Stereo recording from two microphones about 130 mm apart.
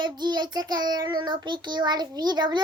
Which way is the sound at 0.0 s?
35° right (ahead or behind).